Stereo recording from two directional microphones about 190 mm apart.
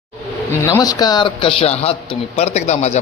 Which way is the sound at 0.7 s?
20° left (ahead or behind).